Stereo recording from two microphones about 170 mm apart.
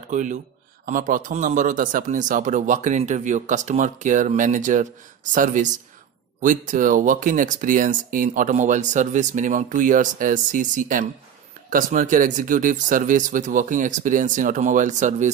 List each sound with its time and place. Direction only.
0.1 s speech: 45° right (ahead or behind)